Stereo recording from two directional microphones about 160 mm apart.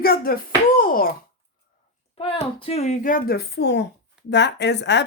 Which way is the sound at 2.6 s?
40° left (ahead or behind).